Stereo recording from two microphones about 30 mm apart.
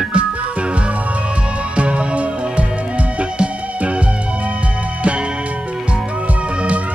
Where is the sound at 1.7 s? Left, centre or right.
Right.